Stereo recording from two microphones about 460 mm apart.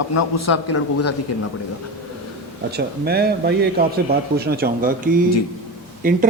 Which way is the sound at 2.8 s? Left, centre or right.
Centre.